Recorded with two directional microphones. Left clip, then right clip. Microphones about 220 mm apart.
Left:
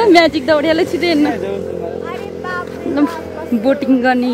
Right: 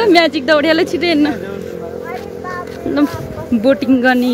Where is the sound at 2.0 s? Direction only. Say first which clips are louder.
Left 1 dB; 50° left (ahead or behind).